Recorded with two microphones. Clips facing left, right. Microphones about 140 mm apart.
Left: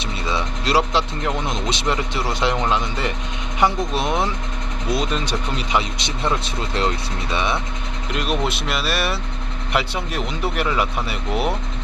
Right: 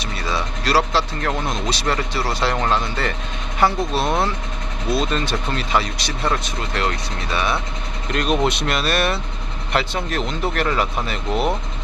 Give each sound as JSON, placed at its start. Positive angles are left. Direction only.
{"t": 0.0, "sound": "speech", "side_deg": 20}
{"t": 8.1, "sound": "speech", "side_deg": 5}